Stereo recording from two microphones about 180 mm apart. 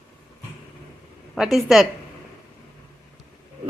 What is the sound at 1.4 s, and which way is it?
Speech, centre (ahead or behind).